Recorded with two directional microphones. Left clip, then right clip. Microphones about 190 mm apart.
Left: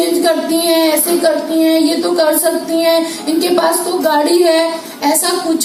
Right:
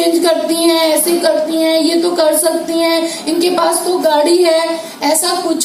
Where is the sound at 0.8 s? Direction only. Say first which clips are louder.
Even; 25° right (ahead or behind).